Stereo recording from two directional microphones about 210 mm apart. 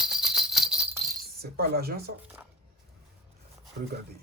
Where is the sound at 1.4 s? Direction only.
45° right (ahead or behind).